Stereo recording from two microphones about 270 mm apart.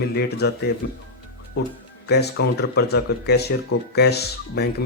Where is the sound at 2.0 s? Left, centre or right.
Left.